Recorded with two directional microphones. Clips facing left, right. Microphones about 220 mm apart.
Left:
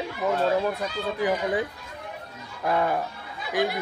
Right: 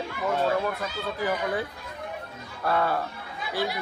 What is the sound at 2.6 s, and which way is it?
Speech, 15° left (ahead or behind).